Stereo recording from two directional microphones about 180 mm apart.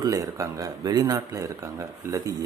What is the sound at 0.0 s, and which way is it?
Speech, 20° right (ahead or behind).